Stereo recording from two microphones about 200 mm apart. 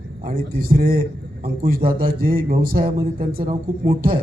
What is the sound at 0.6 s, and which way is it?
A man's voice, 45° right (ahead or behind).